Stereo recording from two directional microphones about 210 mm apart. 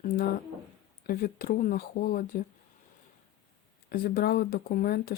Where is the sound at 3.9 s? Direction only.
45° left (ahead or behind).